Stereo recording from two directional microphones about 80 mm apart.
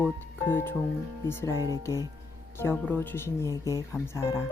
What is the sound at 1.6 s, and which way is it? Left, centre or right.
Speech, right.